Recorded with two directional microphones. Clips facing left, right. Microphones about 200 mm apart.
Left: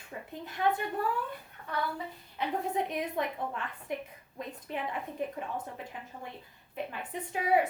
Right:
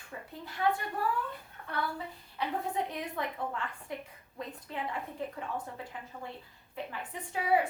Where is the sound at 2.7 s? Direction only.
20° left (ahead or behind).